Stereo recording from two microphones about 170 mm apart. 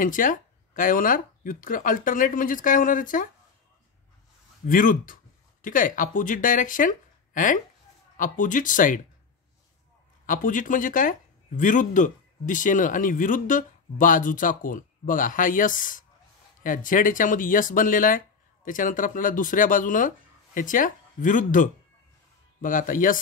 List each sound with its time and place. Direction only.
0.0 s speech: 50° left (ahead or behind)
4.6 s speech: 55° left (ahead or behind)
10.2 s speech: 50° left (ahead or behind)